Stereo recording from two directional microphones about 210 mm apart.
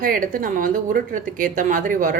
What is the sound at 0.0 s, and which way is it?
A woman's voice, 40° right (ahead or behind).